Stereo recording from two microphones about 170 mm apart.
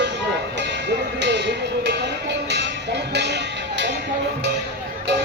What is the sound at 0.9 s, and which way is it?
Speech, 90° right.